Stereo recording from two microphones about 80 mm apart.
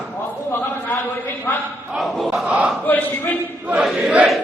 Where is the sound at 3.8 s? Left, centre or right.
Centre.